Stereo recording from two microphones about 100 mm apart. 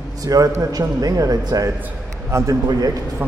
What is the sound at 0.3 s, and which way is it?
A man's voice, 35° right (ahead or behind).